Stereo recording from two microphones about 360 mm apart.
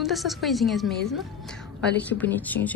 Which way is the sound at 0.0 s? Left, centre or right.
Centre.